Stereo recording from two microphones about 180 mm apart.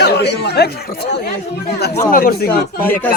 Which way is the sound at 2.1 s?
55° left (ahead or behind).